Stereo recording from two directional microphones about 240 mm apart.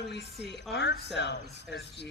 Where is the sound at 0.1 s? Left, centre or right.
Left.